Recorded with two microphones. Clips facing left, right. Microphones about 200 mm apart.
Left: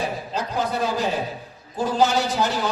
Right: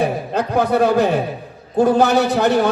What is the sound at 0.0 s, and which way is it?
A man's voice, 60° right (ahead or behind).